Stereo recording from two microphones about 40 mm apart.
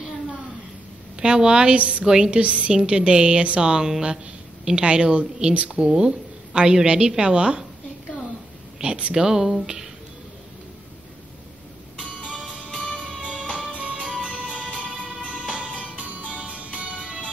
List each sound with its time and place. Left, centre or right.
1.2 s a woman's voice: right
1.8 s a woman's voice: right
2.0 s a woman's voice: centre
2.4 s a woman's voice: right
5.9 s a woman's voice: centre
9.1 s speech: centre
12.8 s music: centre
14.5 s music: right
14.8 s music: left
15.5 s music: right